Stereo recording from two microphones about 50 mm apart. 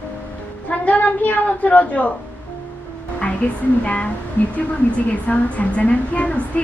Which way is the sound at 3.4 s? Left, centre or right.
Left.